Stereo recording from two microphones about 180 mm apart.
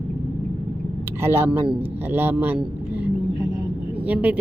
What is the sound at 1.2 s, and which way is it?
A woman's voice, 15° right (ahead or behind).